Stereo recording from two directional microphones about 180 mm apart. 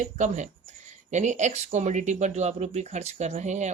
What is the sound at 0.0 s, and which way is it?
Speech, 40° right (ahead or behind).